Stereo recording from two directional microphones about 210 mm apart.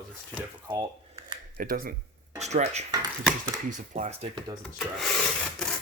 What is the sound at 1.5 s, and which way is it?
Speech, 40° right (ahead or behind).